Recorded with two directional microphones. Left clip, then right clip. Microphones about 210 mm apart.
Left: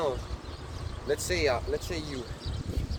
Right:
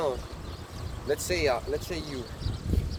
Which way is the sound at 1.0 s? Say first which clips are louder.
Right 1 dB; 30° right (ahead or behind).